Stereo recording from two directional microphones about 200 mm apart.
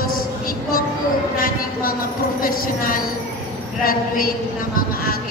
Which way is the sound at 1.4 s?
45° left (ahead or behind).